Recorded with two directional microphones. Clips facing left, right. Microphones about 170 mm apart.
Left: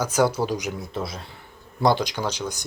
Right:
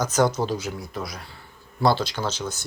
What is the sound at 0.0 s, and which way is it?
Speech, 10° left (ahead or behind).